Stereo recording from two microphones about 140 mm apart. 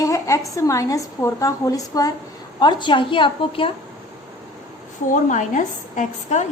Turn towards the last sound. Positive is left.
turn(degrees=60)  # may be behind; listen again after turning